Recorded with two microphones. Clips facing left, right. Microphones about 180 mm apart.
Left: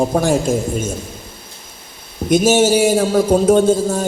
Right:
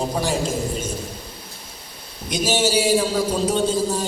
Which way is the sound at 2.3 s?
50° left (ahead or behind).